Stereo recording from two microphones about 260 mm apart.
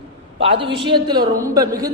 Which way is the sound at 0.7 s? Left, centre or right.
Centre.